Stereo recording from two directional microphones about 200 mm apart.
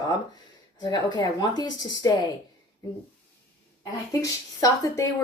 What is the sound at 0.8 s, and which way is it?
Speech, 20° left (ahead or behind).